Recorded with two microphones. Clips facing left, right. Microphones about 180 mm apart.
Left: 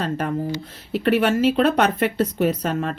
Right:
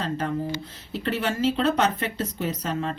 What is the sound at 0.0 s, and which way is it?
A woman's voice, 60° left (ahead or behind).